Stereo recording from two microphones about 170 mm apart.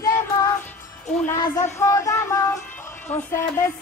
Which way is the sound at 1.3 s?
20° left (ahead or behind).